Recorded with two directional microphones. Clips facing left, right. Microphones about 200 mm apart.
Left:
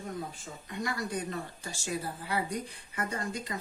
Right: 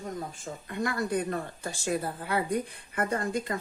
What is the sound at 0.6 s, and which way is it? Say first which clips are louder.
A woman's voice: right 4 dB; 55° right (ahead or behind).